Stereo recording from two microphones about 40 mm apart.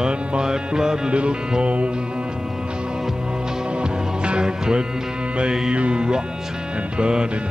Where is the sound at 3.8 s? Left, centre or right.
Right.